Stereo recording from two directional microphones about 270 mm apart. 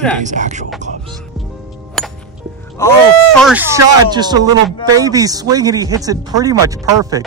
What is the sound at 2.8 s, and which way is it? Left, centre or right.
Speech, centre.